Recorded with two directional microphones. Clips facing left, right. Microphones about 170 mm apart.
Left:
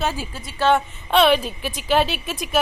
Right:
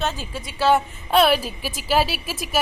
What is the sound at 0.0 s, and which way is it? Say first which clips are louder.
Speech: left 2 dB; 10° left (ahead or behind).